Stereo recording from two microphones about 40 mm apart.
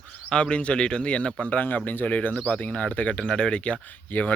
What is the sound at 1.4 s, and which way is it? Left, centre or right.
Speech, left.